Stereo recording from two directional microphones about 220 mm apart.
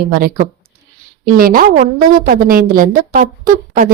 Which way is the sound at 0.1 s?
40° right (ahead or behind).